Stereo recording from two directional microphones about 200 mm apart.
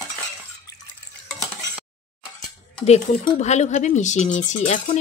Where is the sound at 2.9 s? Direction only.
35° left (ahead or behind).